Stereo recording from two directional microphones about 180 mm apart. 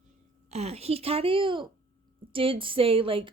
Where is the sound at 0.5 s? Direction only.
35° right (ahead or behind).